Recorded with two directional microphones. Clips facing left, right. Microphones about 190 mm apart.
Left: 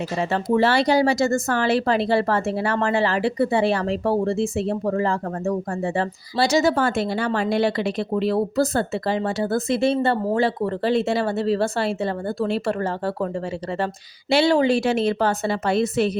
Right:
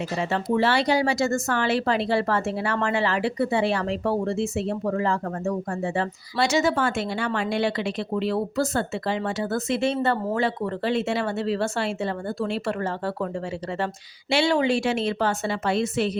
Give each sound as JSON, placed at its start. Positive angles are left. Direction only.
{"t": 0.2, "sound": "speech", "side_deg": 40}
{"t": 14.3, "sound": "speech", "side_deg": 35}